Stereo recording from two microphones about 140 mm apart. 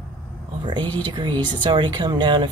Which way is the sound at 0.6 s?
30° right (ahead or behind).